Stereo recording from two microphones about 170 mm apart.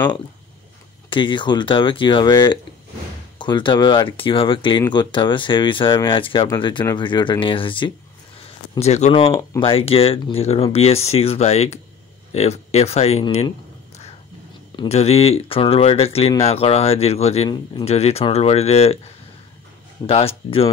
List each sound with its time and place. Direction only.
1.1 s speech: 30° left (ahead or behind)
9.3 s speech: 15° left (ahead or behind)
9.6 s speech: 35° left (ahead or behind)
14.8 s speech: 40° left (ahead or behind)
20.1 s speech: 35° left (ahead or behind)